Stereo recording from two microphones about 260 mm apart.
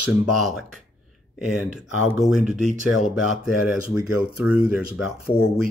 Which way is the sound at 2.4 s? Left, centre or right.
Right.